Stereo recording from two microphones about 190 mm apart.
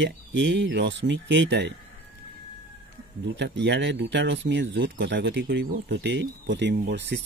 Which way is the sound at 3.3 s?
65° right (ahead or behind).